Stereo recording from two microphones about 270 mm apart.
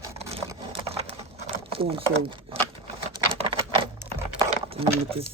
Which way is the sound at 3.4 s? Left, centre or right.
Right.